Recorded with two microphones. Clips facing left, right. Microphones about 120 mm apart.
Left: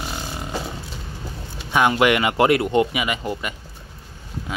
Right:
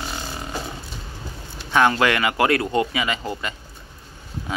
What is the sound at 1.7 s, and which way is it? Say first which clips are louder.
Speech: left 1 dB; 15° left (ahead or behind).